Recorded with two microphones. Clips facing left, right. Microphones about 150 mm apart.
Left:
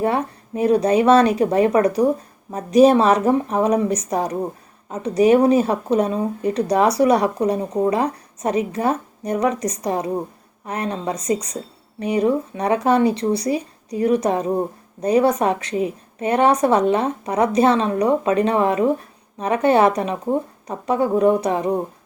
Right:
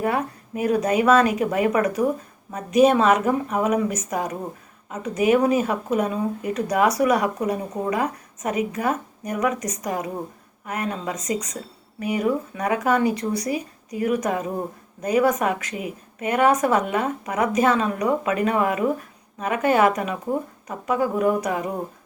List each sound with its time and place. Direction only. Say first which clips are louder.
0.0 s a woman's voice: left 3 dB; 25° left (ahead or behind)